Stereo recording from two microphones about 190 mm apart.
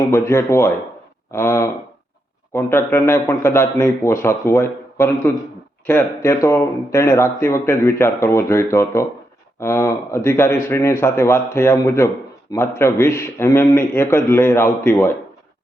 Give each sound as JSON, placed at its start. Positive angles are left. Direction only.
{"t": 0.0, "sound": "a man's voice", "side_deg": 15}